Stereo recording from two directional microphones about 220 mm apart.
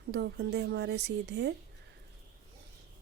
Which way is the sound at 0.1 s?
50° right (ahead or behind).